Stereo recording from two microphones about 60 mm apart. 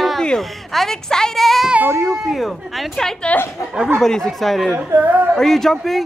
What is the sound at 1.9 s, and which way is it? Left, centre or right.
A woman's voice, centre.